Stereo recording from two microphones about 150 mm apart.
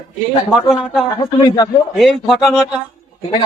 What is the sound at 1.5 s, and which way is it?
Speech, 25° left (ahead or behind).